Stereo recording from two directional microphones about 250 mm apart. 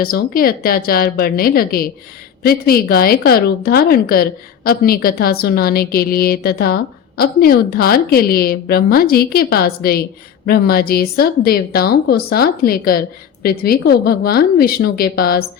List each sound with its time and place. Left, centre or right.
0.0 s a woman's voice: left